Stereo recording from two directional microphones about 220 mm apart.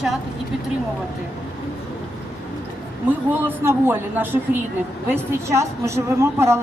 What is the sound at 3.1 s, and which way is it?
A man's voice, 10° right (ahead or behind).